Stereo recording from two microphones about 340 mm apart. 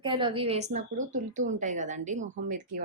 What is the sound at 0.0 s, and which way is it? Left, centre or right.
A woman's voice, centre.